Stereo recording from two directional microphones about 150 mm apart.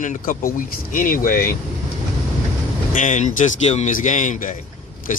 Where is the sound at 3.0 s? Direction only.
55° left (ahead or behind).